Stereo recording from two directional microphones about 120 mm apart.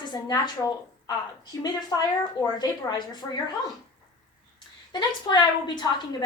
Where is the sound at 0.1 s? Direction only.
35° left (ahead or behind).